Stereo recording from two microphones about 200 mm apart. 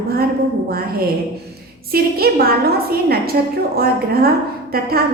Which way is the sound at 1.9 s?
50° right (ahead or behind).